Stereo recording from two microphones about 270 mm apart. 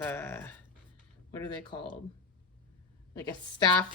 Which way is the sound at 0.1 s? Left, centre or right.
Centre.